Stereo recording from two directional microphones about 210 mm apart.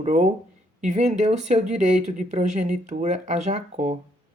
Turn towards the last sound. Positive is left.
turn(degrees=-35)  # may be behind; listen again after turning